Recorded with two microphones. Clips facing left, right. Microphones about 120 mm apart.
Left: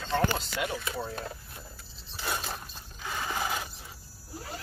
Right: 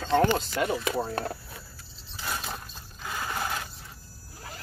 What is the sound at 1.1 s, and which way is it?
Speech, 70° right (ahead or behind).